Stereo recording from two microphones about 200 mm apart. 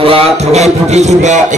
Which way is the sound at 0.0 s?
30° right (ahead or behind).